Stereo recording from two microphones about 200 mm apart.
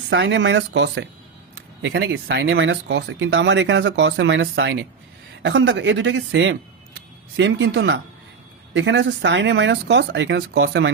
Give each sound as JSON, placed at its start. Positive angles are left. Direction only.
{"t": 0.1, "sound": "speech", "side_deg": -65}